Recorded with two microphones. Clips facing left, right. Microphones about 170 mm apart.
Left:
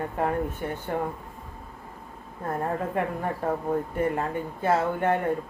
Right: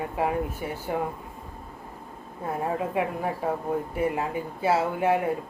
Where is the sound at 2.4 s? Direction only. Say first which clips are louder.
Even; 5° right (ahead or behind).